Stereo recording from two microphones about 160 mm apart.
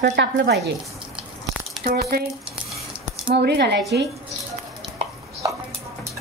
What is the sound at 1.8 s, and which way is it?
Speech, 75° right (ahead or behind).